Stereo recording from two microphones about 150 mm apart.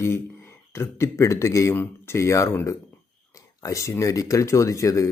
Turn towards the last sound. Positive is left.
turn(degrees=20)  # may be behind; listen again after turning